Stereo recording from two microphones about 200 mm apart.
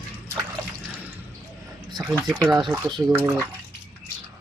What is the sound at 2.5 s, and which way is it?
Speech, 20° right (ahead or behind).